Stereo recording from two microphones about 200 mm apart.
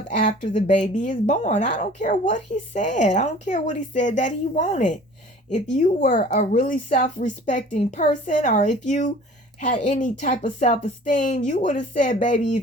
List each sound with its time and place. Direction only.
0.2 s a woman's voice: 35° left (ahead or behind)